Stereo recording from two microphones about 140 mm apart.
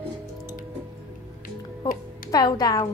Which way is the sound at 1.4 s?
90° left.